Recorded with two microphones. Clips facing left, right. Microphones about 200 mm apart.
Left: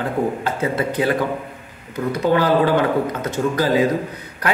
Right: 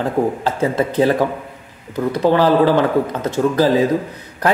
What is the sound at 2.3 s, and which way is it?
Speech, 35° right (ahead or behind).